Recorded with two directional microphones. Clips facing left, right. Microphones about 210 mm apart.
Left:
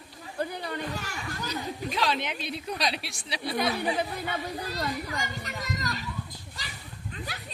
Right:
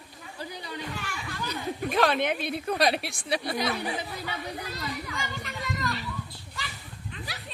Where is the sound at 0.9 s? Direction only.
40° left (ahead or behind).